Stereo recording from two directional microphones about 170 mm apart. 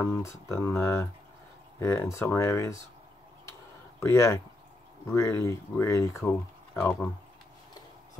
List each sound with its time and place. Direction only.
0.0 s speech: 15° left (ahead or behind)
4.0 s speech: 15° left (ahead or behind)